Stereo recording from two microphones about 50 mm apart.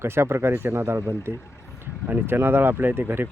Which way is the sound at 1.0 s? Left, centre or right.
Left.